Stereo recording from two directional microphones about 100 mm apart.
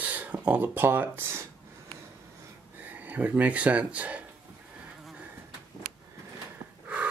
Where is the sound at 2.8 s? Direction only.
15° right (ahead or behind).